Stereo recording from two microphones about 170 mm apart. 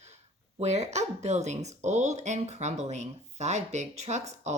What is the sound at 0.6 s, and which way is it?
Speech, 40° right (ahead or behind).